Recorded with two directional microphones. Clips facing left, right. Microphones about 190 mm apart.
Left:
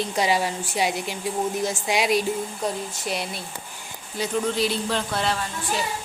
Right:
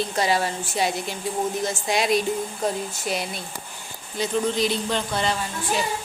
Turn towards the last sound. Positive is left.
turn(degrees=0)  # may be behind; listen again after turning